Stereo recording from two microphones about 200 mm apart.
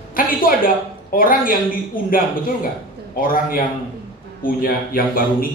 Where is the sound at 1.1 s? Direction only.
45° left (ahead or behind).